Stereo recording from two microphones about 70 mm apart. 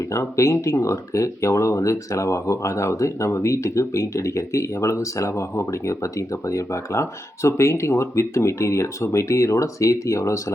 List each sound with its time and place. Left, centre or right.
0.1 s speech: left